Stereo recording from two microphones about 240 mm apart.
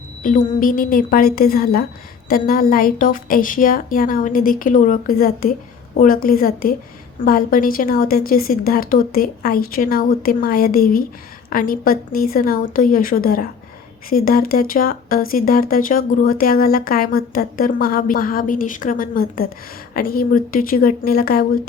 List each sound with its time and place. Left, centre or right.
0.2 s speech: left